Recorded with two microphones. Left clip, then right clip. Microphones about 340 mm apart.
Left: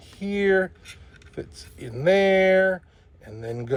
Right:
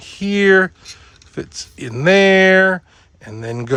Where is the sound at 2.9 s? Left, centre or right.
Right.